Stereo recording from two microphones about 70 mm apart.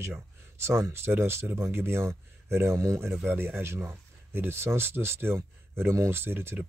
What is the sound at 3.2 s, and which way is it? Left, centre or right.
Speech, right.